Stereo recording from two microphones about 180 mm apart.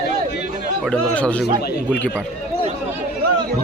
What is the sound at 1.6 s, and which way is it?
Speech, 65° left (ahead or behind).